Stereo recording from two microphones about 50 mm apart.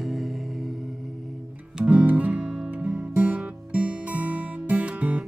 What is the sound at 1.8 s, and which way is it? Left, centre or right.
Music, right.